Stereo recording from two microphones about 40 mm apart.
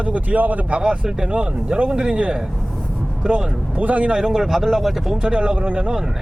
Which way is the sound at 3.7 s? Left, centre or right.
Right.